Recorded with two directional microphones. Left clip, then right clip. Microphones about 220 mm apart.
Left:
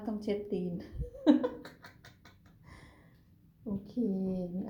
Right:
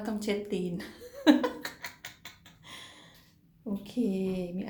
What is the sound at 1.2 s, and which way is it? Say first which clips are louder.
Laughter: right 3 dB; centre (ahead or behind).